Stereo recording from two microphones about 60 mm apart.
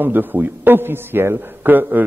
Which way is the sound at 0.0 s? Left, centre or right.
Right.